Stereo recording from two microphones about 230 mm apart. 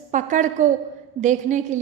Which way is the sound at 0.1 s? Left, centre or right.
Right.